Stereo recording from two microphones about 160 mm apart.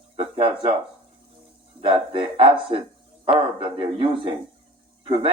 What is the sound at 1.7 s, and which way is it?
Speech, 35° right (ahead or behind).